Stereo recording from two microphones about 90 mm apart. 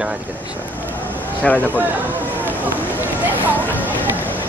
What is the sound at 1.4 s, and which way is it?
Speech, 15° left (ahead or behind).